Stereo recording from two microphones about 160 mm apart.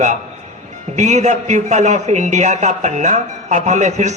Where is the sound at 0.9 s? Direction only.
45° right (ahead or behind).